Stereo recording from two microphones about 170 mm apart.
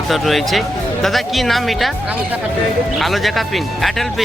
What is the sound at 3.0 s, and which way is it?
Speech, centre (ahead or behind).